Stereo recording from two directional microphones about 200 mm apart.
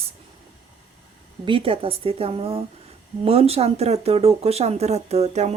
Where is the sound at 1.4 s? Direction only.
25° right (ahead or behind).